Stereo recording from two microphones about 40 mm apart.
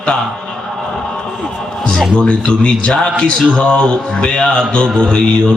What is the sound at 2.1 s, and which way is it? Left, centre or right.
A man's voice, centre.